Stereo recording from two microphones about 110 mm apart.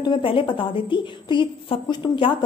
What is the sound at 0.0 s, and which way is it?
A woman's voice, 50° left (ahead or behind).